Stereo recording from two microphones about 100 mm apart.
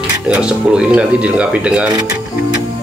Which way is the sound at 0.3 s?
10° right (ahead or behind).